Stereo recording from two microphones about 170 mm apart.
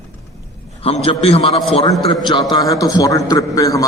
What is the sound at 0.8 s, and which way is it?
A man's voice, 35° left (ahead or behind).